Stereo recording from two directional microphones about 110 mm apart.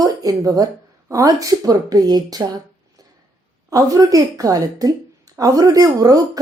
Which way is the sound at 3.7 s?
30° right (ahead or behind).